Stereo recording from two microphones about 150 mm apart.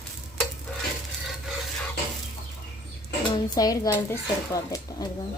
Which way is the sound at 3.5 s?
25° left (ahead or behind).